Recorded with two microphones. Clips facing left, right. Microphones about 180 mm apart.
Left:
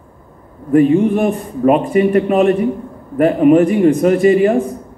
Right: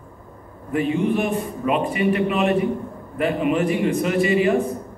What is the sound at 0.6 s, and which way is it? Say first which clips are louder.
A man's voice: left 10 dB; 45° left (ahead or behind).